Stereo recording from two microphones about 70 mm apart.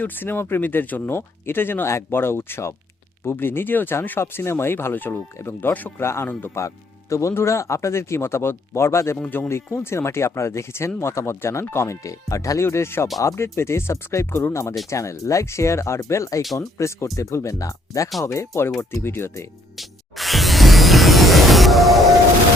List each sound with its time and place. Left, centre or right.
0.0 s speech: left
6.0 s speech: left
6.6 s speech: left
19.7 s music: centre